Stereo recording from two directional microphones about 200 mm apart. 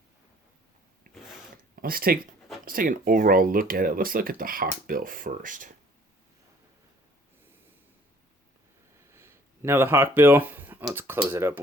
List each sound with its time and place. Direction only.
1.1 s gears: 45° right (ahead or behind)
1.7 s speech: 45° right (ahead or behind)
9.0 s speech: 15° right (ahead or behind)